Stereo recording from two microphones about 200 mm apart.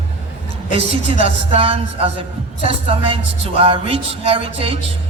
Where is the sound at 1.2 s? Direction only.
30° right (ahead or behind).